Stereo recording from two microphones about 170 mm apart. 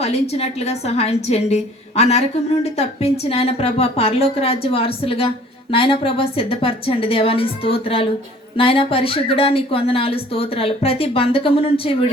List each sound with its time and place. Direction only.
0.0 s a woman's voice: 40° left (ahead or behind)